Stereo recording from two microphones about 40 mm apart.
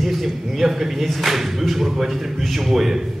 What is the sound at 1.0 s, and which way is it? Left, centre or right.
A man's voice, centre.